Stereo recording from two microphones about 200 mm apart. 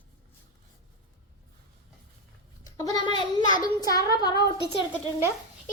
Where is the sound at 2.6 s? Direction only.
20° left (ahead or behind).